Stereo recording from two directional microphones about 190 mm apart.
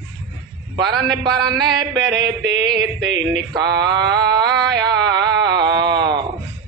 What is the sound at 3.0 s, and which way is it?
Speech, 70° right (ahead or behind).